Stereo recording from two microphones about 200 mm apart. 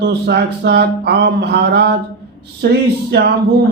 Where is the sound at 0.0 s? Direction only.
55° right (ahead or behind).